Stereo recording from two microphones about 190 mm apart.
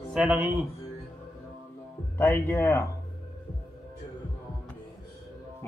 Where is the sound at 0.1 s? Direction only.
5° right (ahead or behind).